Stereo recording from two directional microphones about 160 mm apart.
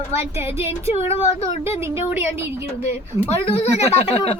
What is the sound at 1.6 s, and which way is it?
Speech, 15° right (ahead or behind).